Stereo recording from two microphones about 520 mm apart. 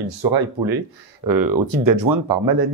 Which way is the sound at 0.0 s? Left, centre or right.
Right.